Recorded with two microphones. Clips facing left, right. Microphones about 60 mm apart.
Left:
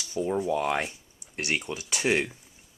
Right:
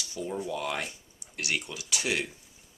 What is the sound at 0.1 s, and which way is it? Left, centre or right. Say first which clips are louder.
Speech: left 7 dB; left.